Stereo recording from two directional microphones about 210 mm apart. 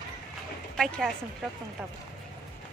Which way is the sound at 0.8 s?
Centre (ahead or behind).